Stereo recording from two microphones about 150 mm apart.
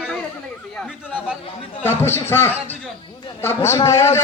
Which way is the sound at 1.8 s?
15° left (ahead or behind).